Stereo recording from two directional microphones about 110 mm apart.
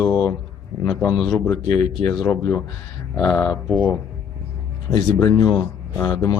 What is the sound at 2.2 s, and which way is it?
Speech, 25° left (ahead or behind).